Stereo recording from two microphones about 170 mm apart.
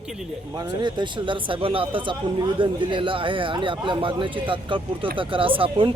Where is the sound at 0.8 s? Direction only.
25° right (ahead or behind).